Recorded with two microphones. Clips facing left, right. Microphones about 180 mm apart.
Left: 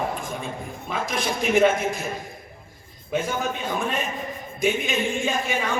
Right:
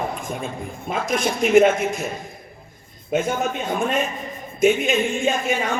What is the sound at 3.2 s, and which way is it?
Speech, 45° right (ahead or behind).